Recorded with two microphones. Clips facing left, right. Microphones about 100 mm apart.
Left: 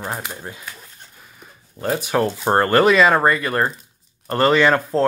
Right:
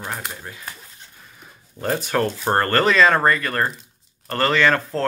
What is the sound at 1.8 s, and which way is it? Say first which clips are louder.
Speech: left 2 dB; 5° left (ahead or behind).